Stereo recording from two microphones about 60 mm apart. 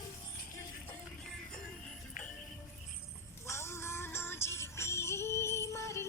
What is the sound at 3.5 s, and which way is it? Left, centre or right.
Music, left.